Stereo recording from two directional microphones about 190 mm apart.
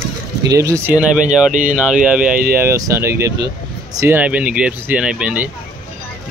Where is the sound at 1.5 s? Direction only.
40° right (ahead or behind).